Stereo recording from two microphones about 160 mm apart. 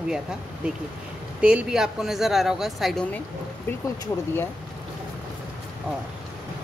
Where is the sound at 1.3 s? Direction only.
5° right (ahead or behind).